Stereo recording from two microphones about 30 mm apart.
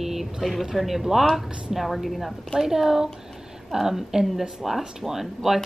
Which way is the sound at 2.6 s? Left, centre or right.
Centre.